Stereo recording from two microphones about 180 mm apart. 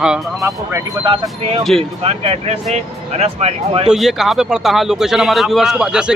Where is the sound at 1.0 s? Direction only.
25° right (ahead or behind).